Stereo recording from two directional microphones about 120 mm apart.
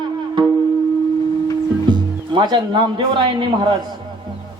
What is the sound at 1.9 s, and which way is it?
Speech, 40° right (ahead or behind).